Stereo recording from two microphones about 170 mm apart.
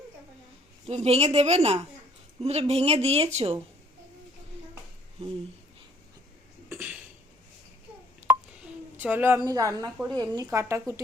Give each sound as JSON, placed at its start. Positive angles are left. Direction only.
{"t": 0.9, "sound": "speech", "side_deg": -35}
{"t": 6.7, "sound": "a sound", "side_deg": -10}
{"t": 9.0, "sound": "a woman's voice", "side_deg": -10}